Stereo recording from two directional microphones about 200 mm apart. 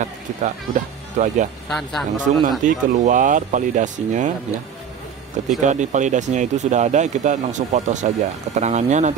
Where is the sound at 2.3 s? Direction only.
40° right (ahead or behind).